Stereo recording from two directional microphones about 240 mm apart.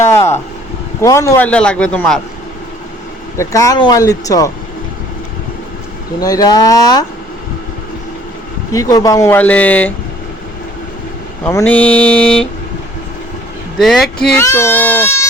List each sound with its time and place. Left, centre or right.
0.1 s vehicle: centre
1.0 s a man's voice: centre
3.3 s speech: centre
6.1 s speech: centre
8.7 s speech: centre
11.4 s a man's voice: centre
13.7 s a man's voice: centre